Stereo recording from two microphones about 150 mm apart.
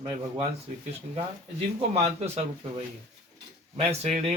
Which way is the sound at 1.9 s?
45° right (ahead or behind).